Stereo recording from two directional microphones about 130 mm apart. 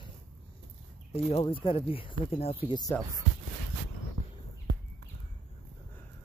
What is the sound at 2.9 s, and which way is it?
Speech, 15° left (ahead or behind).